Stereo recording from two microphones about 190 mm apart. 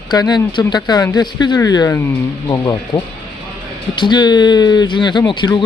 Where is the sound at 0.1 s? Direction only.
20° left (ahead or behind).